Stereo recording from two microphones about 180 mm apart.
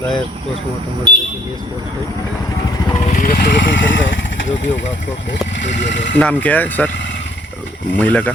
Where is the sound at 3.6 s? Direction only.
90° left.